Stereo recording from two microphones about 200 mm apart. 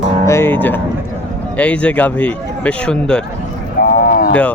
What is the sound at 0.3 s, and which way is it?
Speech, 10° left (ahead or behind).